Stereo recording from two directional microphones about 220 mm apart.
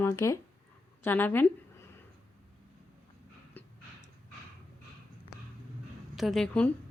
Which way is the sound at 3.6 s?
10° left (ahead or behind).